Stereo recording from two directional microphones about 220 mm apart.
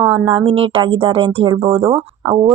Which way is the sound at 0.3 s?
25° right (ahead or behind).